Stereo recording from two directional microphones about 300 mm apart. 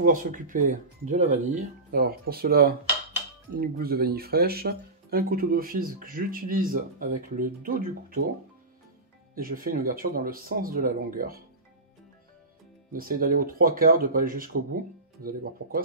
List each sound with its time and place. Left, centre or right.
0.0 s speech: right
9.3 s speech: right
12.9 s speech: right